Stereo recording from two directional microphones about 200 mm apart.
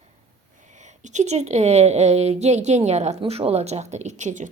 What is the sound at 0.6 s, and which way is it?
A woman's voice, 35° right (ahead or behind).